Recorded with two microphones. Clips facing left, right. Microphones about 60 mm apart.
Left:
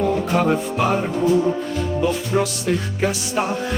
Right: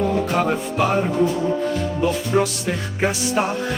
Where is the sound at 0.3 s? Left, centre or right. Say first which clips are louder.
Left 2 dB; centre.